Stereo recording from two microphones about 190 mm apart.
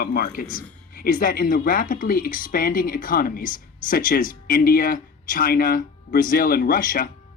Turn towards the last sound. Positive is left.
turn(degrees=45)  # may be behind; listen again after turning